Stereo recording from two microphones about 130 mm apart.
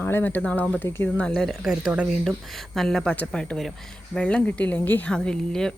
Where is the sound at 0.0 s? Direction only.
15° left (ahead or behind).